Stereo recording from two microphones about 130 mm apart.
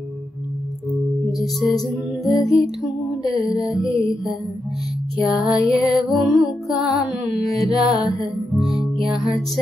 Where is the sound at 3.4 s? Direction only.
5° right (ahead or behind).